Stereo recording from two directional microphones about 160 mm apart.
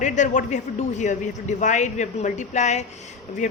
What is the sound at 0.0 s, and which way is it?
Speech, 50° left (ahead or behind).